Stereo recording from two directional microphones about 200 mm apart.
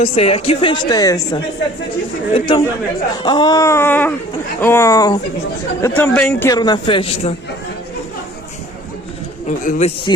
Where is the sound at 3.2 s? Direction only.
20° left (ahead or behind).